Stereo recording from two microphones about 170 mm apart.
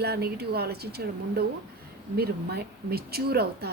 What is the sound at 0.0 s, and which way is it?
A woman's voice, 70° right (ahead or behind).